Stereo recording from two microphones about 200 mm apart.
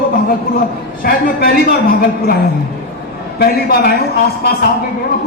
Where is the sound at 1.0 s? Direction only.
45° left (ahead or behind).